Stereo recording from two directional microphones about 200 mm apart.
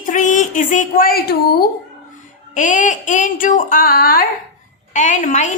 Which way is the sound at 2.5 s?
40° left (ahead or behind).